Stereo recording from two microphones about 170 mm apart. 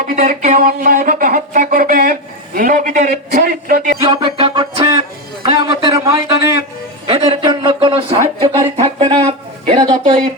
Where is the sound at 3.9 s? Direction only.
30° right (ahead or behind).